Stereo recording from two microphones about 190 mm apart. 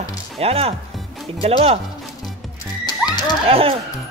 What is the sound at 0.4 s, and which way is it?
Speech, 30° right (ahead or behind).